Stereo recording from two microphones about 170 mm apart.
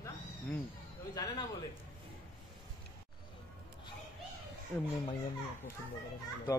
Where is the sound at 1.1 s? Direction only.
20° left (ahead or behind).